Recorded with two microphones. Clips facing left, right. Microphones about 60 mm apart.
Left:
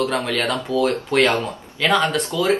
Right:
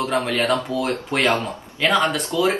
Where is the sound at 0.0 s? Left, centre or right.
Centre.